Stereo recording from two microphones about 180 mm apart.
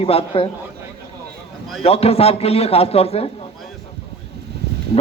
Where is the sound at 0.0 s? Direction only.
35° left (ahead or behind).